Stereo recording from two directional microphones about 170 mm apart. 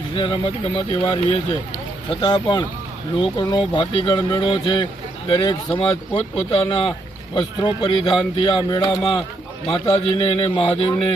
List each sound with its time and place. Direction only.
0.1 s a man's voice: 30° left (ahead or behind)